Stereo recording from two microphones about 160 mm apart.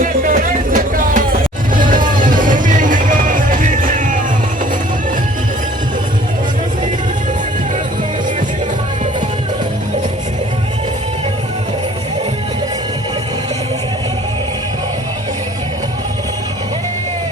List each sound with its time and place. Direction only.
0.0 s music: 55° right (ahead or behind)